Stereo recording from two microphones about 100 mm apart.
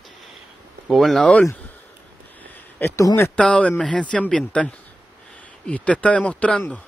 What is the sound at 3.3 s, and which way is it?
A man's voice, 10° left (ahead or behind).